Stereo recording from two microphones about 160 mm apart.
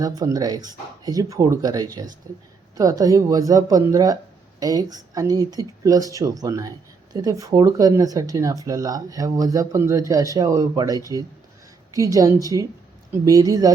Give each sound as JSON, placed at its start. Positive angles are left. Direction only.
{"t": 0.0, "sound": "speech", "side_deg": -25}